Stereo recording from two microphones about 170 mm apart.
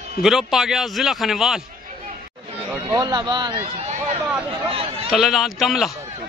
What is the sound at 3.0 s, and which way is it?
A man's voice, 25° right (ahead or behind).